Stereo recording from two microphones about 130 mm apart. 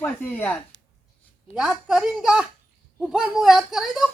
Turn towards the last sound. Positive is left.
turn(degrees=0)  # may be behind; listen again after turning